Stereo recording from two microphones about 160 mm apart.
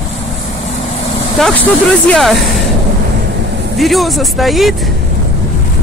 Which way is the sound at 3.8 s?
Centre (ahead or behind).